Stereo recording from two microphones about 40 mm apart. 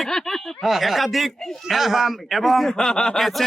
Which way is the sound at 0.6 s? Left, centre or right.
Centre.